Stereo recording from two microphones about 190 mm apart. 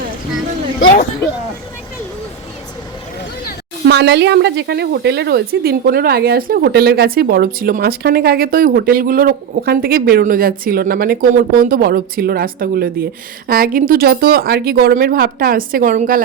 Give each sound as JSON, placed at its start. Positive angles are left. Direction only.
{"t": 3.8, "sound": "a woman's voice", "side_deg": -65}